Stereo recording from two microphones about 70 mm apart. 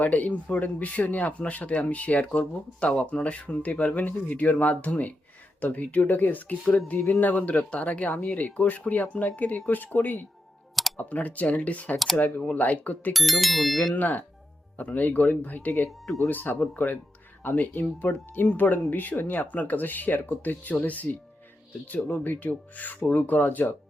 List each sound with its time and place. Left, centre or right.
0.0 s speech: left
13.1 s speech: centre
13.9 s speech: left